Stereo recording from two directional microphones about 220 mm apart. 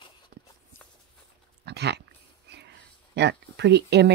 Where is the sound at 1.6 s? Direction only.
50° right (ahead or behind).